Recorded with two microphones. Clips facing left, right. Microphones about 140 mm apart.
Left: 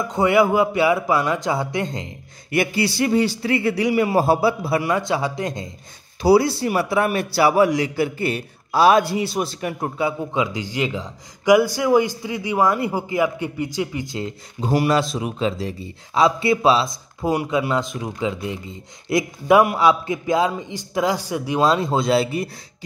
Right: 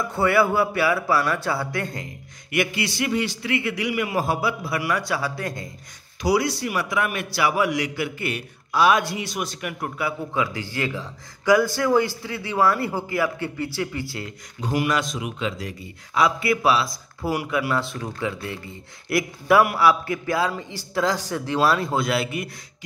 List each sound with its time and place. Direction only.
0.0 s a man's voice: 15° left (ahead or behind)
2.5 s a man's voice: 35° left (ahead or behind)